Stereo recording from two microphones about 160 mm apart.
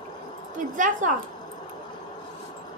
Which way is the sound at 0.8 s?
55° right (ahead or behind).